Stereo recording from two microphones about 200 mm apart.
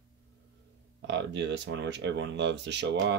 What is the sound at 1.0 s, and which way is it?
Speech, 60° right (ahead or behind).